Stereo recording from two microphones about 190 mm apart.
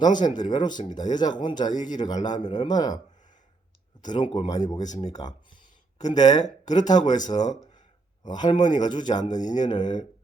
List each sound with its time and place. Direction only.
0.0 s speech: 20° left (ahead or behind)
4.0 s speech: 25° left (ahead or behind)
6.1 s speech: 20° left (ahead or behind)